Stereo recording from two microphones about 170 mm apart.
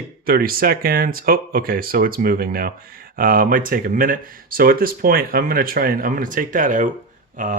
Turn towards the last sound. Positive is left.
turn(degrees=-50)  # may be behind; listen again after turning